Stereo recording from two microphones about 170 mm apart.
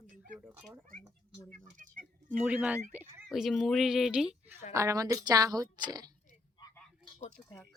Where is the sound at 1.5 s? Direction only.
50° right (ahead or behind).